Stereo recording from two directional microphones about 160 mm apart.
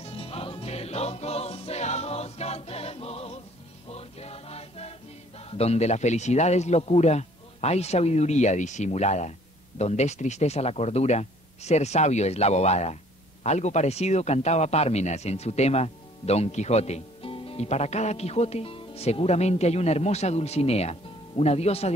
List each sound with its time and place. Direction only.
0.0 s music: 40° left (ahead or behind)
5.4 s a man's voice: 40° left (ahead or behind)